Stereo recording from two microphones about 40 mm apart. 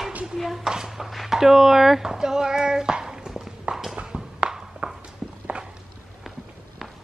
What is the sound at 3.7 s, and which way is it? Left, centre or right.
Clip-clop, right.